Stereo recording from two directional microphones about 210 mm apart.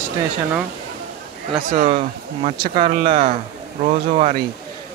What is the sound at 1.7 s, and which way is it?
Speech, 35° right (ahead or behind).